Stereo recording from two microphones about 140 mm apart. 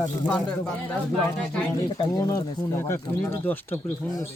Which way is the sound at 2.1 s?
25° left (ahead or behind).